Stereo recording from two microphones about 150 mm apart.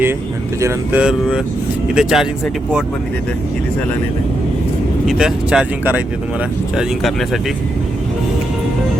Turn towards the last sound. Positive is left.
turn(degrees=0)  # may be behind; listen again after turning